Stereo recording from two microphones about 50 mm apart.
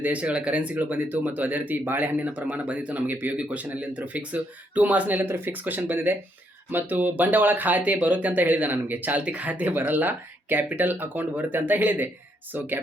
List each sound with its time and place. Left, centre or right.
0.0 s speech: right
0.9 s speech: right